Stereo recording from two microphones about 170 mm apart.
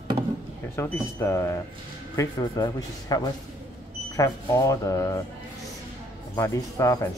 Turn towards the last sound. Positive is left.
turn(degrees=20)  # may be behind; listen again after turning